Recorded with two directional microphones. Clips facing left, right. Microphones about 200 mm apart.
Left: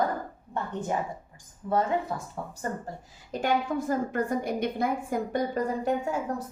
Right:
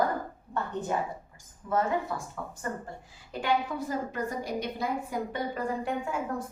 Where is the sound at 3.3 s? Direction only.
45° left (ahead or behind).